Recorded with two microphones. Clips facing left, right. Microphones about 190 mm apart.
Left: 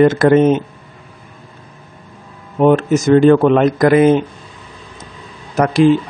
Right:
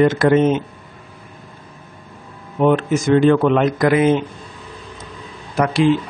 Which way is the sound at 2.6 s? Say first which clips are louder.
Left 4 dB; 45° left (ahead or behind).